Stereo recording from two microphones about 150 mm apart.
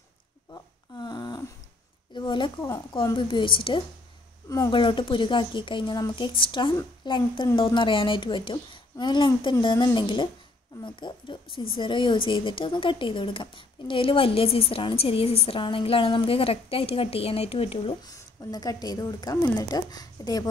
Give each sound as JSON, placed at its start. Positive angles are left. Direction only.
{"t": 0.5, "sound": "a sound", "side_deg": 30}
{"t": 2.9, "sound": "speech", "side_deg": 30}
{"t": 18.0, "sound": "a woman's voice", "side_deg": 25}